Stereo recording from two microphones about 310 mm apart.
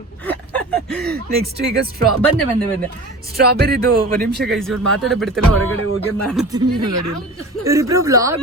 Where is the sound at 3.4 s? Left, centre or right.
Right.